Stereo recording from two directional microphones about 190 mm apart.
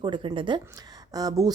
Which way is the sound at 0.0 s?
25° right (ahead or behind).